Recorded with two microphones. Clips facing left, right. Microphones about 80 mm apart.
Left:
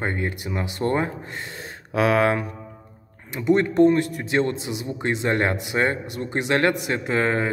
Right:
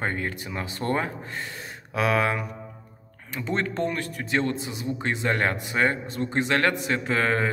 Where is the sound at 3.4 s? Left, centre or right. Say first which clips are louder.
Left 9 dB; centre.